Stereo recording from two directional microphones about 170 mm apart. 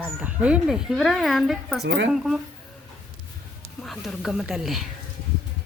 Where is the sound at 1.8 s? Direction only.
90° right.